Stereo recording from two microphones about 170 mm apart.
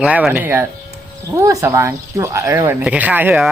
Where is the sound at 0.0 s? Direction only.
5° right (ahead or behind).